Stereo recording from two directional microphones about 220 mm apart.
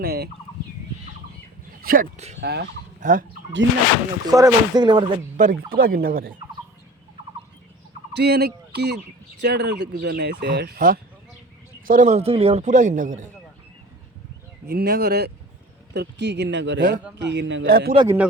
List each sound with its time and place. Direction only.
0.0 s fowl: 45° right (ahead or behind)
1.8 s speech: 40° right (ahead or behind)
2.4 s speech: 50° right (ahead or behind)
4.3 s speech: 15° right (ahead or behind)
5.4 s speech: 35° right (ahead or behind)
8.1 s speech: 45° right (ahead or behind)
14.7 s speech: 45° right (ahead or behind)
17.9 s speech: 20° right (ahead or behind)